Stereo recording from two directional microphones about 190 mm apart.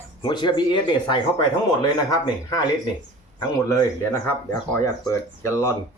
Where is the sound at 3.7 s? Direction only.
15° left (ahead or behind).